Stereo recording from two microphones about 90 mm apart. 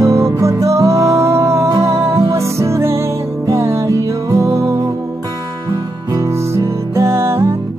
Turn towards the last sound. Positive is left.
turn(degrees=-30)  # may be behind; listen again after turning